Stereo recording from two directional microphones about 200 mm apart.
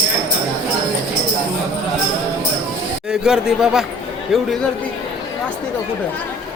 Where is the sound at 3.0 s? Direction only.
5° right (ahead or behind).